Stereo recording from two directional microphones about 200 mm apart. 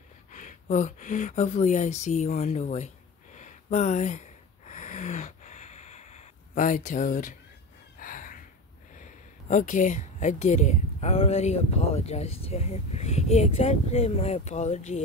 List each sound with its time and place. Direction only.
0.3 s speech: 40° left (ahead or behind)
3.3 s gasp: 35° left (ahead or behind)
8.9 s speech: 40° left (ahead or behind)